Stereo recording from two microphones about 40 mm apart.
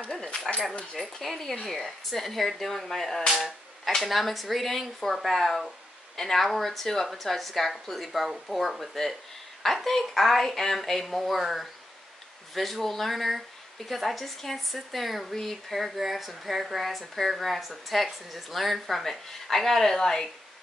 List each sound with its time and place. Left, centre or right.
0.0 s a sound: left
0.9 s a woman's voice: centre
15.8 s a woman's voice: centre